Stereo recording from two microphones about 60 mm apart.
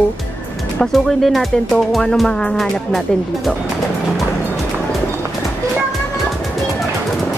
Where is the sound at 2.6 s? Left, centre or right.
Centre.